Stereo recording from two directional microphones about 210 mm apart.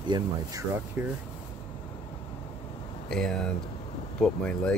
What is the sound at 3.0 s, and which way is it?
Speech, 5° left (ahead or behind).